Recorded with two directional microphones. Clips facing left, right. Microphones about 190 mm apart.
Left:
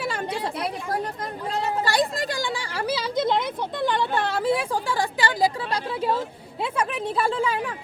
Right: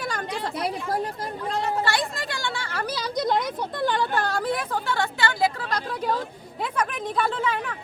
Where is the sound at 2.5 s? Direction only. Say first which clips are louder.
Left 3 dB; 10° left (ahead or behind).